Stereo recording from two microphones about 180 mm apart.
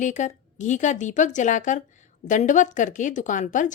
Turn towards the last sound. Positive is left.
turn(degrees=45)  # may be behind; listen again after turning